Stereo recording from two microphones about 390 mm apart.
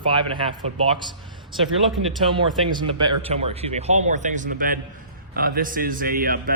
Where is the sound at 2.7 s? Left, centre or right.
Centre.